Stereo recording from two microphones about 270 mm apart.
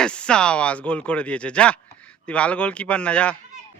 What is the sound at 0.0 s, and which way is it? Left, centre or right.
Speech, centre.